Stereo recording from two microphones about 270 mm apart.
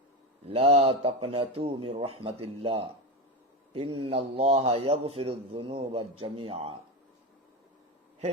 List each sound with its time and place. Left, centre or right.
0.4 s a man's voice: right
4.0 s a man's voice: right